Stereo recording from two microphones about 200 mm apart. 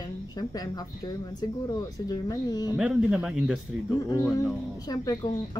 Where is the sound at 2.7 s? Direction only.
5° right (ahead or behind).